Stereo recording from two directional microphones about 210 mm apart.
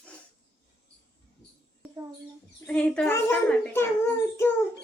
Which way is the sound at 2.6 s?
5° left (ahead or behind).